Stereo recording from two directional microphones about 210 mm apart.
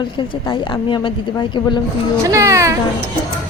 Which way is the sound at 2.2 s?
15° right (ahead or behind).